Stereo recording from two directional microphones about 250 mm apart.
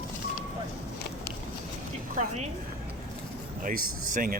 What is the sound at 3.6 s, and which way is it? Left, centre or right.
Speech, right.